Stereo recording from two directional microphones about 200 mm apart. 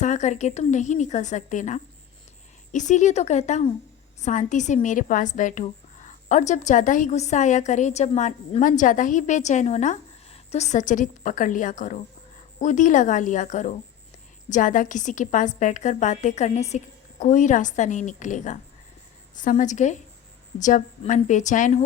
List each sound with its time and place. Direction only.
0.0 s a woman's voice: 35° left (ahead or behind)